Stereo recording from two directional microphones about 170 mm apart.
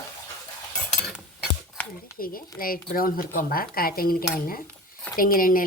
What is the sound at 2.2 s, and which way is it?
A woman's voice, 60° left (ahead or behind).